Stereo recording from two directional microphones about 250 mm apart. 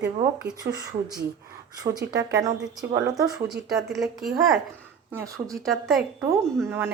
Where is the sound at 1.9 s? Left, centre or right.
Right.